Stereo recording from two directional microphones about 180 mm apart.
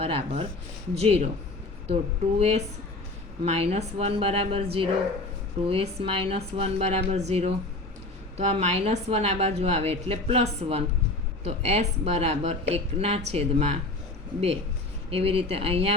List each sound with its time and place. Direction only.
0.0 s a woman's voice: 30° right (ahead or behind)
2.4 s a woman's voice: 35° right (ahead or behind)
15.1 s a woman's voice: 35° right (ahead or behind)